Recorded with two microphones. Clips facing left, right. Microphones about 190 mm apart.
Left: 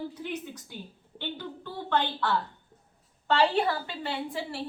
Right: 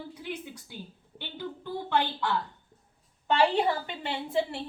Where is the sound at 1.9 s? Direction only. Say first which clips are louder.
Left 1 dB; 10° right (ahead or behind).